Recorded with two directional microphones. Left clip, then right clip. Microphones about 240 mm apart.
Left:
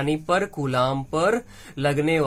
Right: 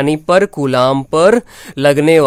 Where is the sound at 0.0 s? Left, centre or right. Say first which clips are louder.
Right 11 dB; right.